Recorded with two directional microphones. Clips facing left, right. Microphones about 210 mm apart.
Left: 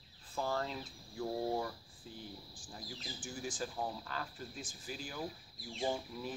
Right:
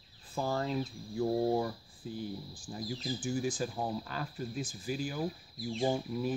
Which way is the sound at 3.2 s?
10° right (ahead or behind).